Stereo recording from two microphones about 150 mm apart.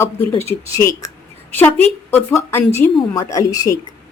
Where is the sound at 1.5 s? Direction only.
10° left (ahead or behind).